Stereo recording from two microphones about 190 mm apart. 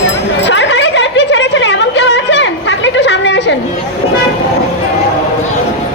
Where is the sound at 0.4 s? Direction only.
70° left (ahead or behind).